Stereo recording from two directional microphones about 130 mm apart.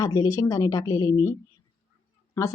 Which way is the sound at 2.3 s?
20° left (ahead or behind).